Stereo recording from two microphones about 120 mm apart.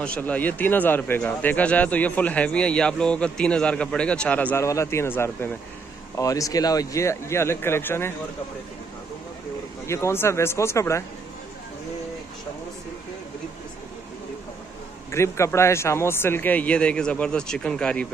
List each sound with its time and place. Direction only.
0.0 s speech: 10° left (ahead or behind)
4.6 s a man's voice: 25° left (ahead or behind)
6.1 s a man's voice: 30° left (ahead or behind)
9.8 s a man's voice: 20° left (ahead or behind)
15.0 s speech: 25° left (ahead or behind); by 18.0 s 5° left (ahead or behind)